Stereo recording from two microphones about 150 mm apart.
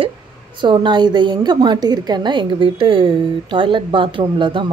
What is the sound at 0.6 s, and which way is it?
A woman's voice, 30° right (ahead or behind).